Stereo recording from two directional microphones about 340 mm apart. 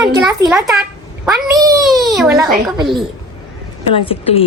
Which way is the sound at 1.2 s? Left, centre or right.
Centre.